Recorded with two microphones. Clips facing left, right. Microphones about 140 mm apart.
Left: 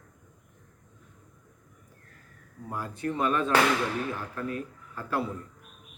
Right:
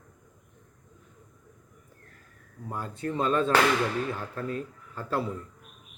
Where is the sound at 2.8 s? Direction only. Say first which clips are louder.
Even; 25° right (ahead or behind).